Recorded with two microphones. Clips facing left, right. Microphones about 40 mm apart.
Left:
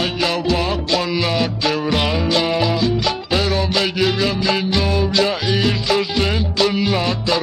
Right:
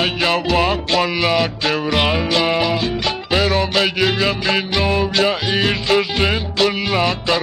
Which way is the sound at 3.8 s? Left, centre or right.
Centre.